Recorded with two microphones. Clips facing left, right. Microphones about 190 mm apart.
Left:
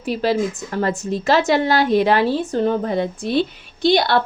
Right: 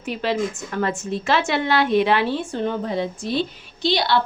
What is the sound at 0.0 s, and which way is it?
A woman's voice, 35° left (ahead or behind).